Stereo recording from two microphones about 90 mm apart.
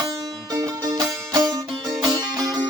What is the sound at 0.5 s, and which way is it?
Music, 45° right (ahead or behind).